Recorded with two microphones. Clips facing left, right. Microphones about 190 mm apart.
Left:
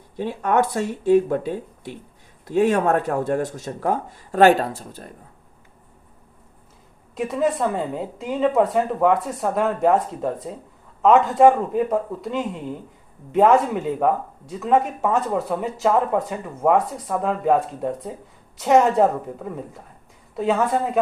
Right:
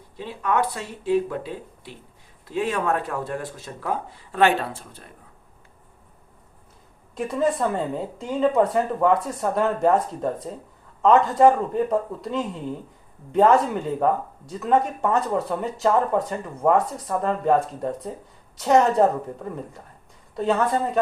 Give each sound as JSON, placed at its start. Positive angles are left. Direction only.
{"t": 0.2, "sound": "speech", "side_deg": 45}
{"t": 7.2, "sound": "speech", "side_deg": 0}